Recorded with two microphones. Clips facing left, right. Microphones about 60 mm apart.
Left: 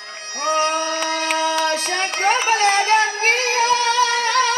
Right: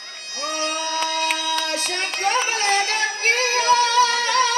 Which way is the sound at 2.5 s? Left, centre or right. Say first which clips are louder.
Left 6 dB; left.